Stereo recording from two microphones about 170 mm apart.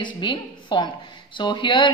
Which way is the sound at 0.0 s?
30° left (ahead or behind).